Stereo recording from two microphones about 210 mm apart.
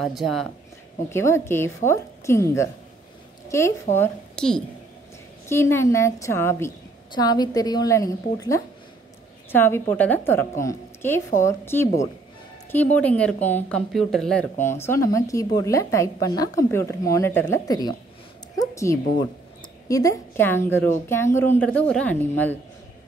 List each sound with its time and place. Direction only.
0.0 s speech: centre (ahead or behind)
1.1 s a woman's voice: 10° left (ahead or behind)
12.9 s a woman's voice: 5° left (ahead or behind)
18.6 s a sound: 15° left (ahead or behind)
19.9 s a woman's voice: 15° left (ahead or behind)